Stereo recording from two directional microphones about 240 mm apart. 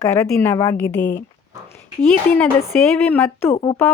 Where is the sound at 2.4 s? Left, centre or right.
Centre.